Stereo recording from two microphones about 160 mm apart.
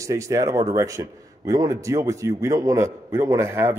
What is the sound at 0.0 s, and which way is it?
A man's voice, 20° right (ahead or behind).